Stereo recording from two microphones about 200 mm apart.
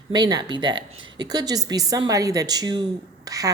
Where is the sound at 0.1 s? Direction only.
20° right (ahead or behind).